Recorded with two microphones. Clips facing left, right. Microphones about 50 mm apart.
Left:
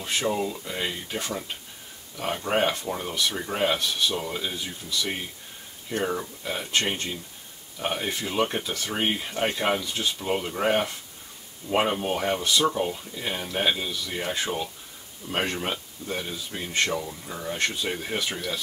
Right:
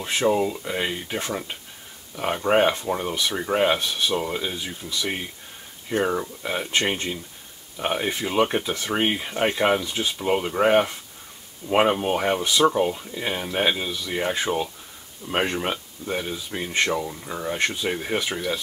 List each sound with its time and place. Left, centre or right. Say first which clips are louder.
0.0 s speech: right 5 dB; right